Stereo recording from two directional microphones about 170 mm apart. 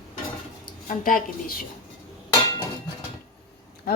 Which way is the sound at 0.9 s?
55° left (ahead or behind).